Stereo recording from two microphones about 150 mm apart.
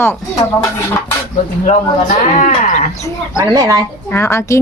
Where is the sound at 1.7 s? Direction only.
50° left (ahead or behind).